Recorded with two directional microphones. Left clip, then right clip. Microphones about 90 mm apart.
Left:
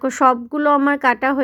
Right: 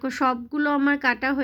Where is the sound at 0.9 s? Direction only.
45° left (ahead or behind).